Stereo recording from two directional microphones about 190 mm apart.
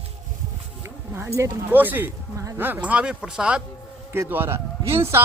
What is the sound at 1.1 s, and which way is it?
A man's voice, 15° right (ahead or behind).